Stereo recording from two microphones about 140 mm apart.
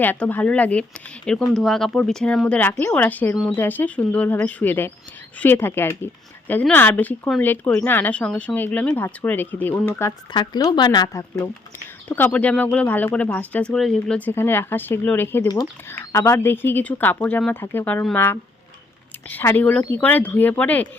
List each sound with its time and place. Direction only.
0.0 s speech: 10° left (ahead or behind)
10.3 s speech: 30° left (ahead or behind)
12.0 s speech: 10° left (ahead or behind)